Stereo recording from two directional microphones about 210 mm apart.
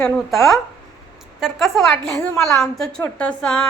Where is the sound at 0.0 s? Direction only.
Centre (ahead or behind).